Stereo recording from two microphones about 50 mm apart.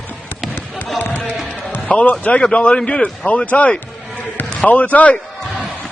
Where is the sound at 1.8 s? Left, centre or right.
Left.